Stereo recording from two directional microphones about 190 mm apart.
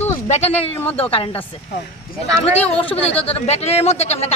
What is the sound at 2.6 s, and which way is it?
Speech, 30° left (ahead or behind).